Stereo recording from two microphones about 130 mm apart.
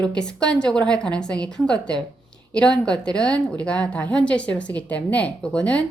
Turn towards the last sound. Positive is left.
turn(degrees=10)  # may be behind; listen again after turning